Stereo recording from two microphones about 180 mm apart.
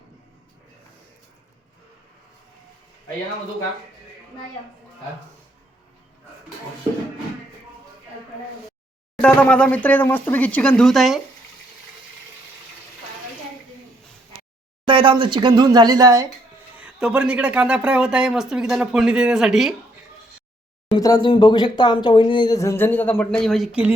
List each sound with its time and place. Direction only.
9.2 s speech: 5° left (ahead or behind)
14.8 s speech: 25° right (ahead or behind)
16.7 s speech: 5° right (ahead or behind)
21.0 s speech: 20° left (ahead or behind); by 23.9 s 5° right (ahead or behind)